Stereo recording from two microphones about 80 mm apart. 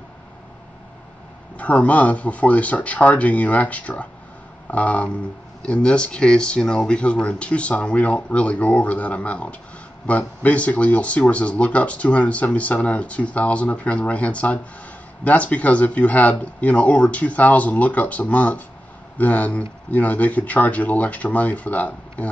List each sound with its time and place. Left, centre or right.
1.6 s speech: centre